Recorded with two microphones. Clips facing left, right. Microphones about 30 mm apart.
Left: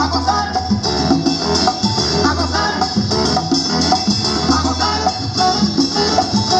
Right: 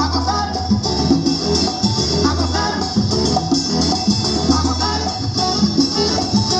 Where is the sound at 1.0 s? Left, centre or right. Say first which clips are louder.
Even; left.